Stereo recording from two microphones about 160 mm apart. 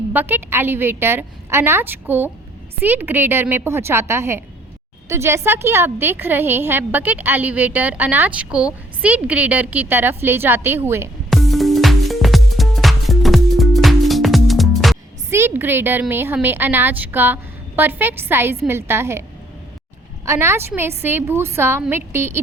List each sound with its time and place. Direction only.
0.1 s a woman's voice: 10° right (ahead or behind)
11.3 s music: centre (ahead or behind)
15.3 s a woman's voice: 15° right (ahead or behind)
20.2 s a woman's voice: 15° right (ahead or behind)